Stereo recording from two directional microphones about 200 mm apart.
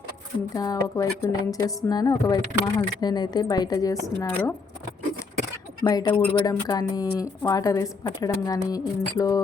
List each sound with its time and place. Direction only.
0.5 s a woman's voice: 20° left (ahead or behind)
5.8 s a woman's voice: 20° left (ahead or behind)